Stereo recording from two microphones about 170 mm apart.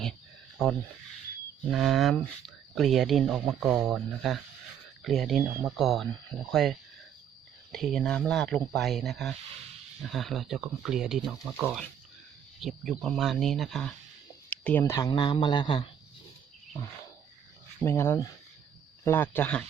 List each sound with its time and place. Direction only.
1.7 s speech: centre (ahead or behind); by 15.9 s 30° left (ahead or behind)
17.8 s speech: 15° left (ahead or behind)